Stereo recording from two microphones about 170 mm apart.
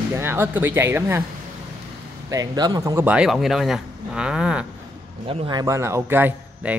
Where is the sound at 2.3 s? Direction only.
20° right (ahead or behind).